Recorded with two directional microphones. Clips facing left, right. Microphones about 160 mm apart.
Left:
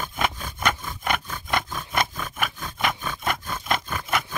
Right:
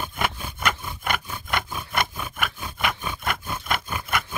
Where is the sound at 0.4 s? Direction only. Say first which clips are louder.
Left 1 dB; 10° right (ahead or behind).